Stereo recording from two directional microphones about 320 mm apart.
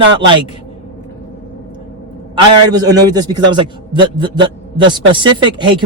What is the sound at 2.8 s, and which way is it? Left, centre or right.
A man's voice, centre.